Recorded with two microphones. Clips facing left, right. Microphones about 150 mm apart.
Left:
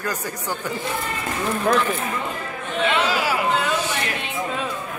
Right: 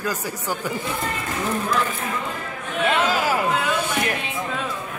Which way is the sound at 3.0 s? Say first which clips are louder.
Right 1 dB; 45° right (ahead or behind).